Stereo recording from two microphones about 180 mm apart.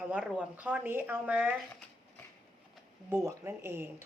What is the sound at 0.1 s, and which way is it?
Speech, 5° right (ahead or behind).